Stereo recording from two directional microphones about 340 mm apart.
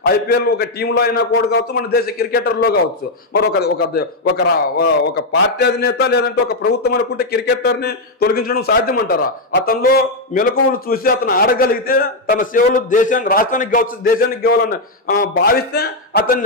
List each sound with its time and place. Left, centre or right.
0.0 s a man's voice: left